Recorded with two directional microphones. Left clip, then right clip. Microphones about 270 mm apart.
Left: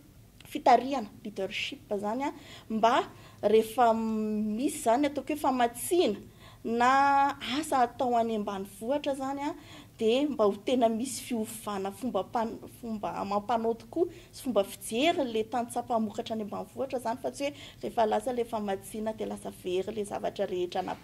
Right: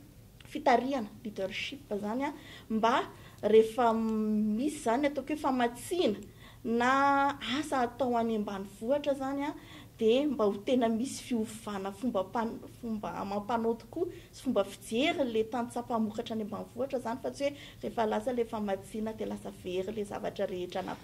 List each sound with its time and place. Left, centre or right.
0.5 s a woman's voice: left